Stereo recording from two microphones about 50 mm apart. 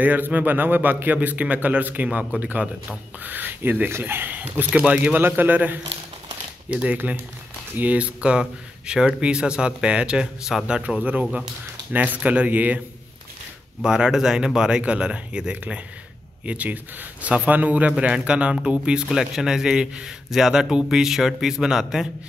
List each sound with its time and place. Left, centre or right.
0.0 s a man's voice: right
4.8 s speech: centre
5.1 s a man's voice: right; by 10.2 s centre
10.5 s a man's voice: centre
11.9 s a man's voice: right
13.8 s speech: centre
16.4 s a man's voice: right
17.9 s speech: right